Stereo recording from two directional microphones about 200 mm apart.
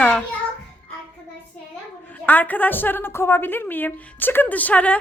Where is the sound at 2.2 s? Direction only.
10° left (ahead or behind).